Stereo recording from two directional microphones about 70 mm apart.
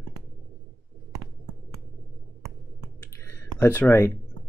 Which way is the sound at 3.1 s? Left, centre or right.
Left.